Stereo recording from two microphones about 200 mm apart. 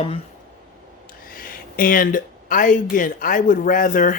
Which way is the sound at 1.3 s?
45° left (ahead or behind).